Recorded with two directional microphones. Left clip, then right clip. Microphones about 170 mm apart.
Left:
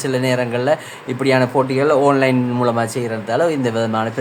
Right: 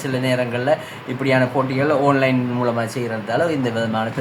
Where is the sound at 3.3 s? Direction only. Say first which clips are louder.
Left 3 dB; 40° left (ahead or behind).